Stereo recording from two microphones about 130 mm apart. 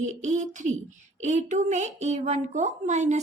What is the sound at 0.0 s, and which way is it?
Speech, 70° right (ahead or behind).